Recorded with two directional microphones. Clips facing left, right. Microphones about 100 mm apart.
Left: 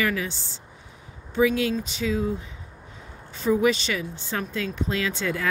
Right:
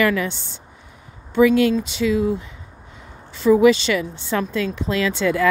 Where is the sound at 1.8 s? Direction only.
90° right.